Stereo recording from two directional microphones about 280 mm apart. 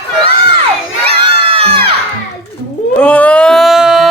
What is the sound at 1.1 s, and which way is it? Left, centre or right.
Crowd, centre.